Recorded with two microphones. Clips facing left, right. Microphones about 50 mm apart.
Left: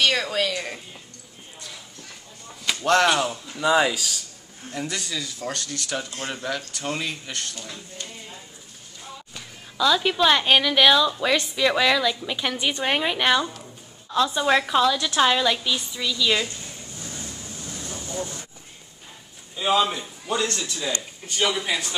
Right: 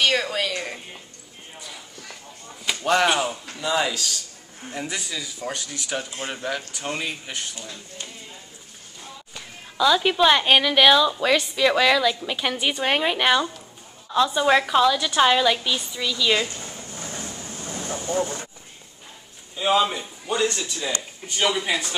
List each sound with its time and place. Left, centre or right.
0.0 s speech: centre
2.6 s speech: centre
3.5 s speech: centre
4.7 s speech: centre
9.3 s a woman's voice: centre
16.5 s vehicle: right
19.5 s speech: centre